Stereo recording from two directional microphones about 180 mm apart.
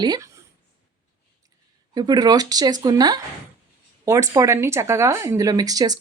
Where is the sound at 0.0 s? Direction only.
25° right (ahead or behind).